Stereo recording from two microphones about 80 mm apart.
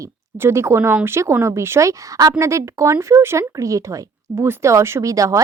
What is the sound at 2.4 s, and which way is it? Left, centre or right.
Speech, right.